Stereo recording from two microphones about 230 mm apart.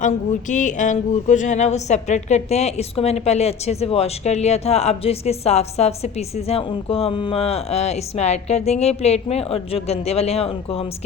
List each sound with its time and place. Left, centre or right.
0.0 s speech: left